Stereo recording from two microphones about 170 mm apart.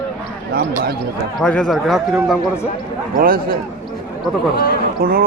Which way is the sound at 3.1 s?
60° right (ahead or behind).